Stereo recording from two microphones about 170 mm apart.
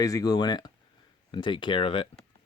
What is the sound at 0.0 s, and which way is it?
Speech, 20° left (ahead or behind).